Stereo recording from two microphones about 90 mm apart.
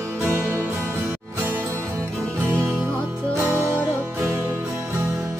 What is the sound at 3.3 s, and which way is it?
Music, 30° right (ahead or behind).